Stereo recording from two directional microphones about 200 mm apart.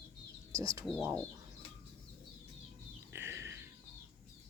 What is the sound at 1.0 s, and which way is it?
Bird, 10° right (ahead or behind).